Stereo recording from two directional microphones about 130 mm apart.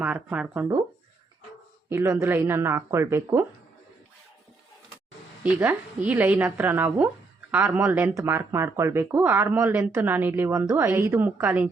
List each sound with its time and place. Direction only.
0.0 s a woman's voice: 10° right (ahead or behind)
1.9 s speech: 20° right (ahead or behind)
5.4 s a woman's voice: 10° right (ahead or behind)